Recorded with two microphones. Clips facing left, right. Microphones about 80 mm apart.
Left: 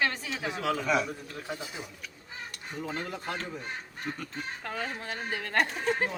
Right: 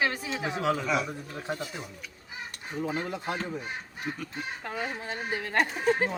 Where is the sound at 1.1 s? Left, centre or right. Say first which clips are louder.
Right 3 dB; centre.